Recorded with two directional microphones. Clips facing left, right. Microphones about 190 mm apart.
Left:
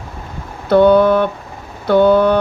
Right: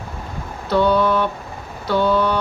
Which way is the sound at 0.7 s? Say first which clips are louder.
Left 7 dB; 55° left (ahead or behind).